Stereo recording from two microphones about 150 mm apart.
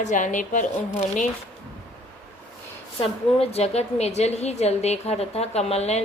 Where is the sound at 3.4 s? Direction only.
45° left (ahead or behind).